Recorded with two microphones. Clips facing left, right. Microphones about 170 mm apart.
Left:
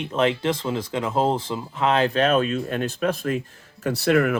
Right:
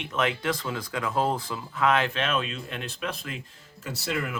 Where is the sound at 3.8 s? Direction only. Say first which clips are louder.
Left 12 dB; 60° left (ahead or behind).